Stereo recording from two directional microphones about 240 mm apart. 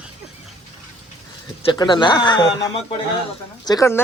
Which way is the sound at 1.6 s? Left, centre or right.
Centre.